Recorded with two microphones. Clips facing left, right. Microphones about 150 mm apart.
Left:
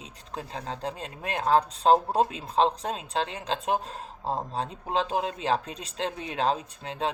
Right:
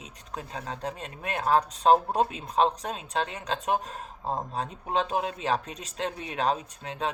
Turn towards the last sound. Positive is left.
turn(degrees=30)  # may be behind; listen again after turning